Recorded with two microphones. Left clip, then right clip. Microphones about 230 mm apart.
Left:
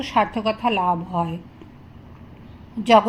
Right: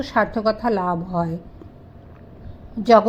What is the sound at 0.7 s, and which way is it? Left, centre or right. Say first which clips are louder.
Speech: left 1 dB; right.